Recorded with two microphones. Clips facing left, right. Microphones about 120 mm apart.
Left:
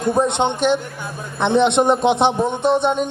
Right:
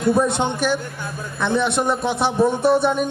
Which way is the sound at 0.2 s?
20° left (ahead or behind).